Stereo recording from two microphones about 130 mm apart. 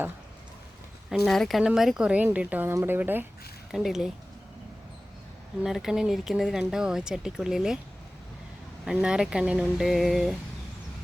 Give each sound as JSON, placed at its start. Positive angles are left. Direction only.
{"t": 1.1, "sound": "speech", "side_deg": 5}
{"t": 3.7, "sound": "speech", "side_deg": -5}
{"t": 5.6, "sound": "speech", "side_deg": -5}
{"t": 8.8, "sound": "speech", "side_deg": -5}